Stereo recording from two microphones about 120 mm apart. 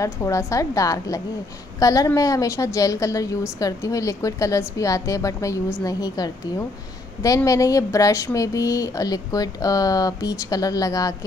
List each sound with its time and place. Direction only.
0.0 s a woman's voice: 25° left (ahead or behind)